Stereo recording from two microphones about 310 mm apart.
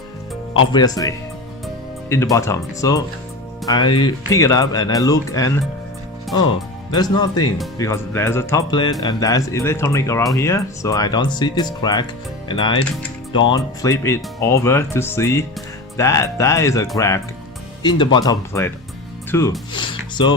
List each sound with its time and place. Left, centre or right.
0.7 s speech: centre
6.9 s speech: centre
13.8 s speech: centre